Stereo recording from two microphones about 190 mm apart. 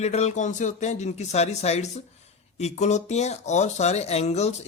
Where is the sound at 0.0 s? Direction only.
35° left (ahead or behind).